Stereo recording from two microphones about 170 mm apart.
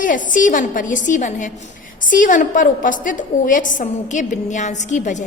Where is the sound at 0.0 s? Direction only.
50° left (ahead or behind).